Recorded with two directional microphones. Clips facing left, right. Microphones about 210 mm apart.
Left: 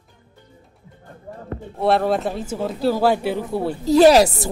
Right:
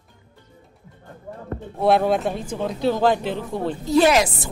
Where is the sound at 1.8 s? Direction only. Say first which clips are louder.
Even; centre (ahead or behind).